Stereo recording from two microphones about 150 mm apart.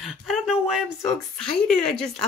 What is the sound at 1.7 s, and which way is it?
Speech, 5° left (ahead or behind).